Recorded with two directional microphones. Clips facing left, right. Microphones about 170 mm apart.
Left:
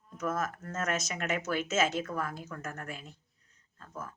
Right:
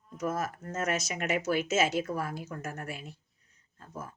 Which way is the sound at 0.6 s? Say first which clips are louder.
Right 2 dB; 15° right (ahead or behind).